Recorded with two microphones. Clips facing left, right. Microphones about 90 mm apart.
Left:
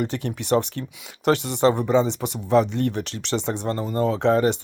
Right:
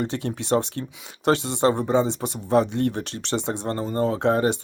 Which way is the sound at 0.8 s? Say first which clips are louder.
Even; 40° right (ahead or behind).